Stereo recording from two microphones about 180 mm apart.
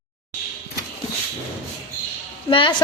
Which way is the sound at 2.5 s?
30° left (ahead or behind).